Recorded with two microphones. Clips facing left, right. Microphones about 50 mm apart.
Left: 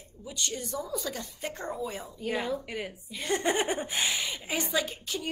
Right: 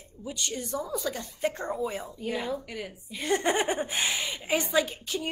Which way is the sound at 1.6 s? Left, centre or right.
Centre.